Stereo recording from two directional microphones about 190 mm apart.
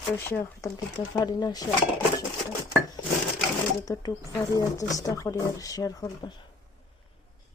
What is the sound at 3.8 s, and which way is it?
Speech, 20° left (ahead or behind).